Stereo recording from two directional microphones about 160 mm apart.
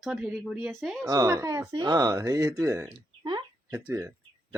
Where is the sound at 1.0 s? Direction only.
20° right (ahead or behind).